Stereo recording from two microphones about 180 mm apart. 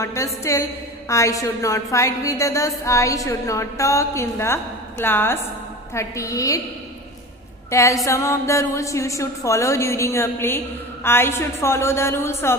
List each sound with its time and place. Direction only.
0.0 s a woman's voice: 15° left (ahead or behind)
7.7 s a woman's voice: 15° left (ahead or behind)